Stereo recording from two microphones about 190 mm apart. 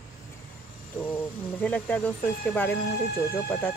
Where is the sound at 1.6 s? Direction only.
10° left (ahead or behind).